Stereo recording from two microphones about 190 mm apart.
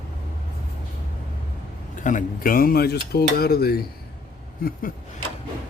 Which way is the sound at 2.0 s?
45° left (ahead or behind).